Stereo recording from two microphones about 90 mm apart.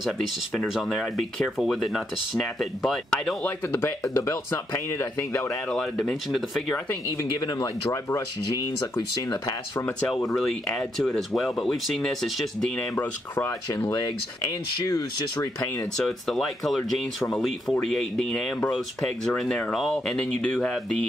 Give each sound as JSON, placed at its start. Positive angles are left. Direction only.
{"t": 0.7, "sound": "speech", "side_deg": 0}
{"t": 3.4, "sound": "speech", "side_deg": 25}
{"t": 5.7, "sound": "speech", "side_deg": 10}
{"t": 7.2, "sound": "speech", "side_deg": 45}
{"t": 9.5, "sound": "speech", "side_deg": 30}
{"t": 10.0, "sound": "speech", "side_deg": 5}
{"t": 12.9, "sound": "speech", "side_deg": 20}
{"t": 13.8, "sound": "speech", "side_deg": 40}
{"t": 16.0, "sound": "speech", "side_deg": 5}